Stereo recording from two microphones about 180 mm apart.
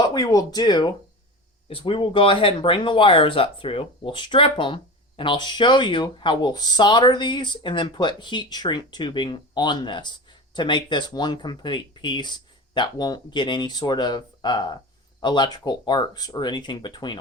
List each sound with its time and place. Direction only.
0.1 s speech: 20° left (ahead or behind)